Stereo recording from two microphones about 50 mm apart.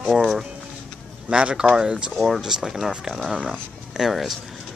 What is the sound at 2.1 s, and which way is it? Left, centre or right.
Speech, centre.